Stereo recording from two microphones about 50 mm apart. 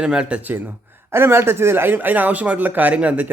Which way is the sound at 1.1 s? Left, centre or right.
Right.